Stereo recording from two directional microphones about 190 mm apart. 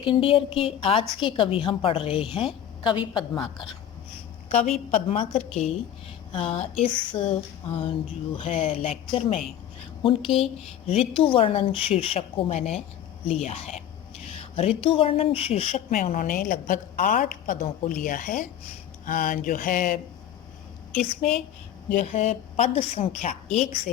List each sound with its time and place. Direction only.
0.0 s a woman's voice: 25° left (ahead or behind)
4.9 s a woman's voice: 35° left (ahead or behind)
6.7 s speech: 5° left (ahead or behind)
7.1 s a woman's voice: 30° left (ahead or behind); by 20.0 s 45° left (ahead or behind)
21.9 s a woman's voice: 35° left (ahead or behind)